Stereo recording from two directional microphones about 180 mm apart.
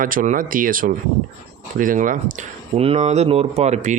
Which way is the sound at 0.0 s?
50° right (ahead or behind).